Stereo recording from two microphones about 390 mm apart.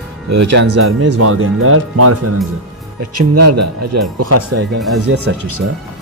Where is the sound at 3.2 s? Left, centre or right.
Right.